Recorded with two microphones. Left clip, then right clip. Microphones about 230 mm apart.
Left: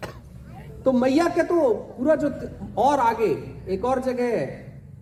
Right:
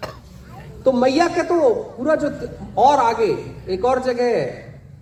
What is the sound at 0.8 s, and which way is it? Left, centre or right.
A man's voice, left.